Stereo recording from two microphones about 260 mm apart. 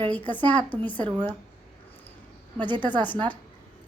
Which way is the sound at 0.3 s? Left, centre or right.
Centre.